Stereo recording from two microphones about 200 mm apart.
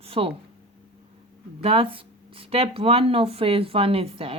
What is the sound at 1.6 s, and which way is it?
Speech, 30° right (ahead or behind).